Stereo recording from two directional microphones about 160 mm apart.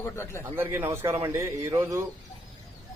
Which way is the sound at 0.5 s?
15° right (ahead or behind).